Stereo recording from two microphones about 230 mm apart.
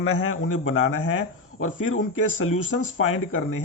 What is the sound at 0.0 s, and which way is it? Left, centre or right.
A man's voice, left.